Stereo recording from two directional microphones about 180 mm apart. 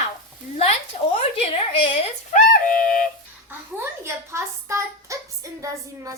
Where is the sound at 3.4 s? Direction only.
15° right (ahead or behind).